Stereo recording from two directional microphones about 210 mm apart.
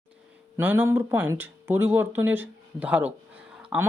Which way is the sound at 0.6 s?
10° right (ahead or behind).